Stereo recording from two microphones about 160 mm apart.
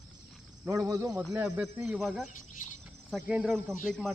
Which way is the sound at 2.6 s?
55° left (ahead or behind).